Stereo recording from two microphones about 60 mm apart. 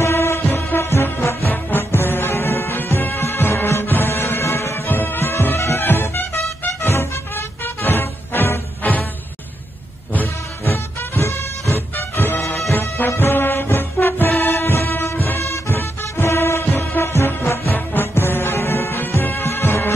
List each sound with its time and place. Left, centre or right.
0.0 s music: left
4.8 s music: left
10.6 s music: left
11.9 s music: left
12.4 s music: left
12.9 s music: left
15.4 s music: left
15.7 s music: left